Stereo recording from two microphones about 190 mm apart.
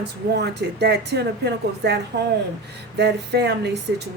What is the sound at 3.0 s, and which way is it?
Speech, 60° right (ahead or behind).